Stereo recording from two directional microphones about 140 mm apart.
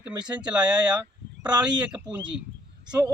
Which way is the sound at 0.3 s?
10° right (ahead or behind).